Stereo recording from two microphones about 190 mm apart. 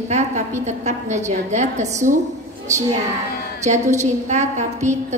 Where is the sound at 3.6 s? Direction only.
40° right (ahead or behind).